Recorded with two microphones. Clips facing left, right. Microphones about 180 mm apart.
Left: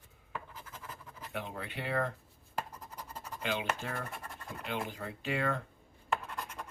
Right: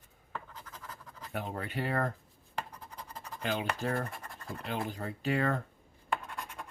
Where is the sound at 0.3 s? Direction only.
5° left (ahead or behind).